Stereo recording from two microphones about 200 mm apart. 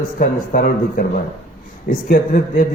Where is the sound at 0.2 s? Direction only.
45° left (ahead or behind).